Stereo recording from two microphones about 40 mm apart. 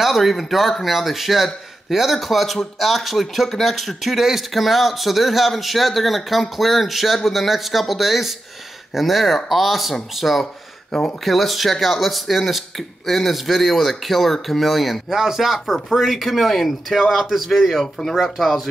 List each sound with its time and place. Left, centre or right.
0.0 s speech: centre
10.4 s a sound: centre
11.2 s speech: centre
15.6 s speech: centre